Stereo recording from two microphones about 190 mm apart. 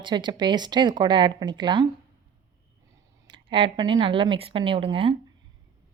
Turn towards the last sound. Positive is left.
turn(degrees=-30)  # may be behind; listen again after turning